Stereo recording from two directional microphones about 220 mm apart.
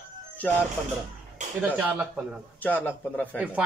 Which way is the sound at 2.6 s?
5° left (ahead or behind).